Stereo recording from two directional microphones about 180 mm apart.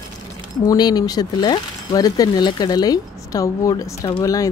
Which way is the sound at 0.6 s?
20° left (ahead or behind).